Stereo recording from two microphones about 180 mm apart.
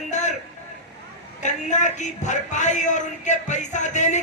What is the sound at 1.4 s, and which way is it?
A man's voice, 40° left (ahead or behind).